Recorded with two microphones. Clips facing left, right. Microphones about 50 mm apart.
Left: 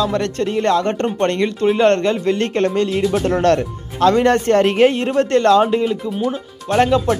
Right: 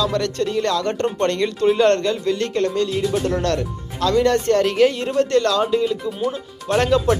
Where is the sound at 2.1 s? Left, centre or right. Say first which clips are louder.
Left 3 dB; left.